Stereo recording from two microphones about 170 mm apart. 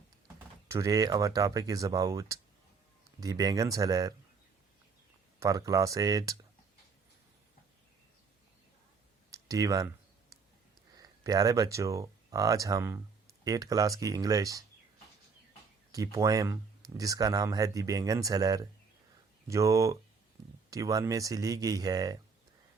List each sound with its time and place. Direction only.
0.7 s speech: 20° right (ahead or behind)
5.4 s speech: 20° right (ahead or behind)
9.3 s clicking: 20° right (ahead or behind)
10.9 s speech: 20° right (ahead or behind)
15.9 s speech: 20° right (ahead or behind)